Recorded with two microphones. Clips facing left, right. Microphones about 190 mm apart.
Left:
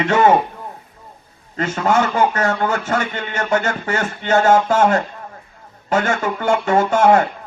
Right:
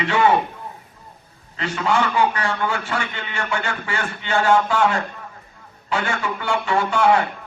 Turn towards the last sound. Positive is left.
turn(degrees=45)  # may be behind; listen again after turning